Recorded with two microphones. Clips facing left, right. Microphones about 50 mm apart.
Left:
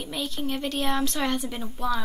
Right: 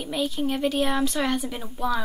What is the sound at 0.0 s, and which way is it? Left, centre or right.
A woman's voice, centre.